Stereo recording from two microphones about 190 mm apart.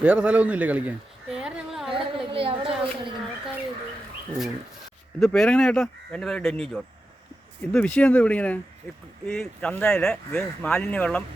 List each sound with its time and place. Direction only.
0.0 s speech: 5° right (ahead or behind)
1.9 s a sound: 30° right (ahead or behind)
5.2 s speech: 5° left (ahead or behind)